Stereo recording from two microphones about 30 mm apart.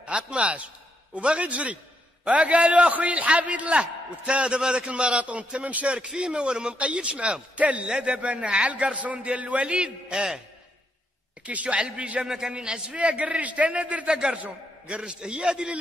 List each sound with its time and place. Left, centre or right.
0.0 s a man's voice: right
2.9 s a man's voice: right
3.8 s a man's voice: right
5.2 s a man's voice: right
6.7 s a man's voice: right
7.5 s a man's voice: right
9.8 s a man's voice: right
11.4 s a man's voice: right
12.4 s a man's voice: right
12.9 s a man's voice: right
15.0 s a man's voice: right